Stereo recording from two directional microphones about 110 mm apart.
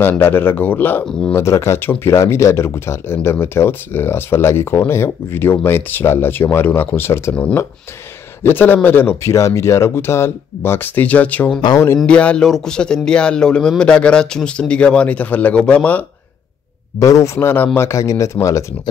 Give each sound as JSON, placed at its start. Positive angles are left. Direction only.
{"t": 0.0, "sound": "speech", "side_deg": 20}
{"t": 8.5, "sound": "speech", "side_deg": 20}
{"t": 17.0, "sound": "speech", "side_deg": 30}